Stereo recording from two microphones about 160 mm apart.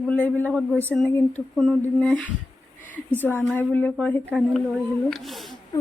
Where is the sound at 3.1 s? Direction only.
10° left (ahead or behind).